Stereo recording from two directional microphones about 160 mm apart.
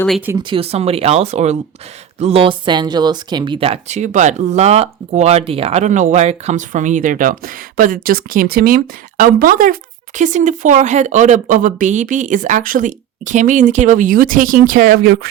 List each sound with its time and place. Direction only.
0.4 s speech: 35° right (ahead or behind); by 15.3 s 65° right (ahead or behind)